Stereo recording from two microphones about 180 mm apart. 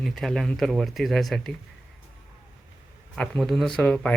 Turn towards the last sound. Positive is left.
turn(degrees=5)  # may be behind; listen again after turning